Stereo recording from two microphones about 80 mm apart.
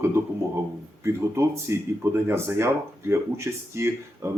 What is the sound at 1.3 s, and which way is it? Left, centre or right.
Speech, right.